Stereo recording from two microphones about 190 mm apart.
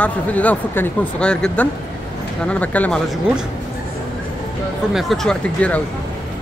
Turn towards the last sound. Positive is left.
turn(degrees=5)  # may be behind; listen again after turning